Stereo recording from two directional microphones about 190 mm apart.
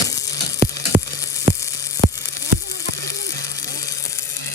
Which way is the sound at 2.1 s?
15° left (ahead or behind).